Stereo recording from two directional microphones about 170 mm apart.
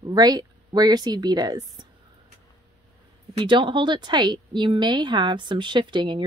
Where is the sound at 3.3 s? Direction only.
30° right (ahead or behind).